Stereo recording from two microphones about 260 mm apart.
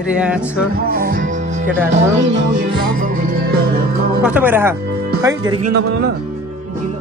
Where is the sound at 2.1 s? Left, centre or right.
Right.